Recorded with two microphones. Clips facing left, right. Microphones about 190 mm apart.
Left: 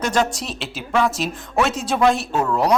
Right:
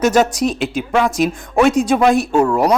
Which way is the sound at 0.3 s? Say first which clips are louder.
Right 11 dB; centre (ahead or behind).